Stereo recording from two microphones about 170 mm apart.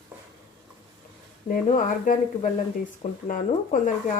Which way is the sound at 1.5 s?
50° left (ahead or behind).